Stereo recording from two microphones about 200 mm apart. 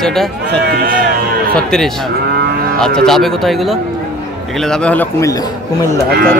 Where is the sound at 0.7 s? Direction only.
50° right (ahead or behind).